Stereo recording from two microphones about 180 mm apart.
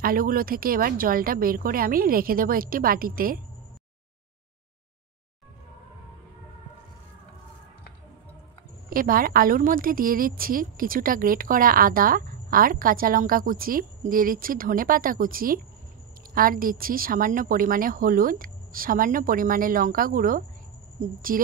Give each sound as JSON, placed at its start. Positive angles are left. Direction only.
{"t": 0.0, "sound": "a woman's voice", "side_deg": -50}
{"t": 8.9, "sound": "a woman's voice", "side_deg": -50}